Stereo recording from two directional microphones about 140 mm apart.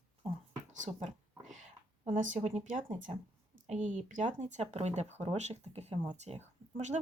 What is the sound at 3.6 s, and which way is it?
Speech, 60° right (ahead or behind).